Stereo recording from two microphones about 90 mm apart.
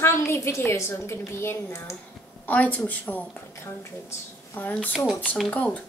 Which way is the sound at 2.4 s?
15° left (ahead or behind).